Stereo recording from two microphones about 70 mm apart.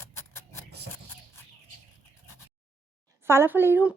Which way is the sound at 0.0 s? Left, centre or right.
Left.